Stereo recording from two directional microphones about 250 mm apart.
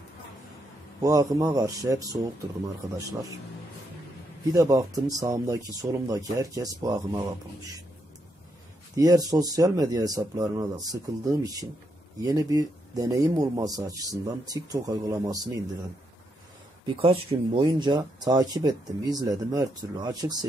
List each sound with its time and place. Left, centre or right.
1.0 s speech: centre
4.6 s speech: centre
8.9 s speech: centre
16.8 s speech: right